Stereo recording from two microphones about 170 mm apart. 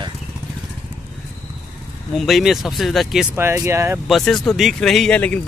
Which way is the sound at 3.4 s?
15° right (ahead or behind).